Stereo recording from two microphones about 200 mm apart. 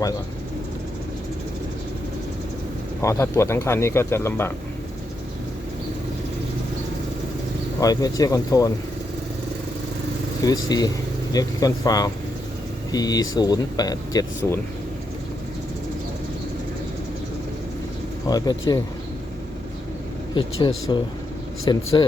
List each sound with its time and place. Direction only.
3.0 s speech: 15° left (ahead or behind)
7.8 s speech: 20° left (ahead or behind)
10.4 s speech: 20° left (ahead or behind)
18.3 s speech: 20° left (ahead or behind)
20.3 s speech: 20° left (ahead or behind)